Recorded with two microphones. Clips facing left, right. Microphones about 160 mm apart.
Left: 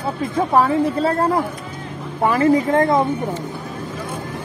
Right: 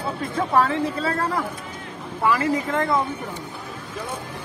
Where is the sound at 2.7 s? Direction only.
50° left (ahead or behind).